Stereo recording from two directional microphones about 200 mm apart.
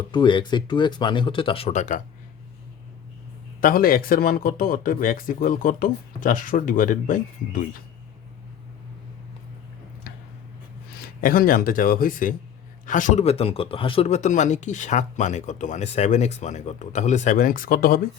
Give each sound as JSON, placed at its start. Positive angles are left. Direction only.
{"t": 0.1, "sound": "speech", "side_deg": 25}
{"t": 3.6, "sound": "speech", "side_deg": 45}
{"t": 11.2, "sound": "a man's voice", "side_deg": 45}